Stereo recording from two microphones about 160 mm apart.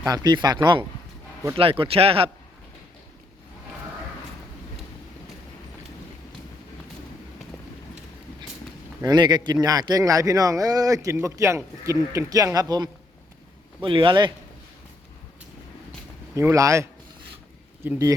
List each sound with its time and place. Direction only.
0.0 s a man's voice: 25° right (ahead or behind)
9.0 s a man's voice: 25° right (ahead or behind)
16.3 s a man's voice: 15° right (ahead or behind)